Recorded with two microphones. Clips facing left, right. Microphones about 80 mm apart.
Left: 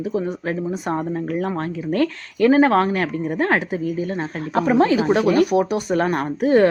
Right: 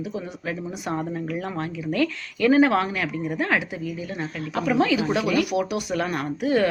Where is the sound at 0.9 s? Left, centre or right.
Left.